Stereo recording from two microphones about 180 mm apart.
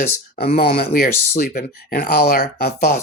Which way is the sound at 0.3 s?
60° left (ahead or behind).